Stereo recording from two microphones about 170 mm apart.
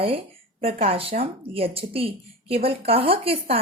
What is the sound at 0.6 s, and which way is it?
Speech, 35° right (ahead or behind).